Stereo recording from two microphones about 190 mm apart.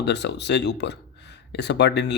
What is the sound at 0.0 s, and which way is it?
Speech, 65° left (ahead or behind).